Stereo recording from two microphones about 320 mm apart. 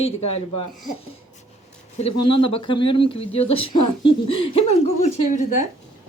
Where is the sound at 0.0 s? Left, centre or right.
Centre.